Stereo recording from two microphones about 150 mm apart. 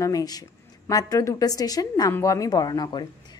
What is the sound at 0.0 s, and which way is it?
A woman's voice, 25° left (ahead or behind).